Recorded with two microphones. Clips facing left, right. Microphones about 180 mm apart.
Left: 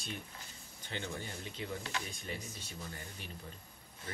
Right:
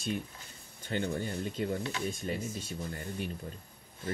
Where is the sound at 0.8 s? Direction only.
55° right (ahead or behind).